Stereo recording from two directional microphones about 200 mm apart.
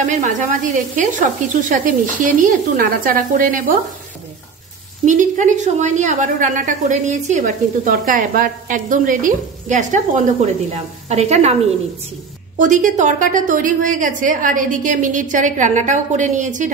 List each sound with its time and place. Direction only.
0.0 s a woman's voice: 35° right (ahead or behind)
5.0 s a woman's voice: 40° right (ahead or behind)
12.5 s a woman's voice: 40° right (ahead or behind)